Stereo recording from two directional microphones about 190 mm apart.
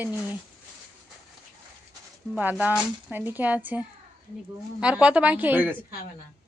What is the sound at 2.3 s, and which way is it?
Speech, 10° right (ahead or behind).